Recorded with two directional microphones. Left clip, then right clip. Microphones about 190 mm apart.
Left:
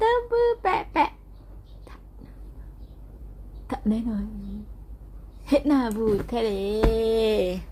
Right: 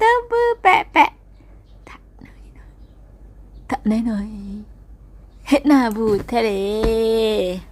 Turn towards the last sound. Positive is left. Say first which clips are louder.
# right 4 dB
turn(degrees=-20)  # may be behind; listen again after turning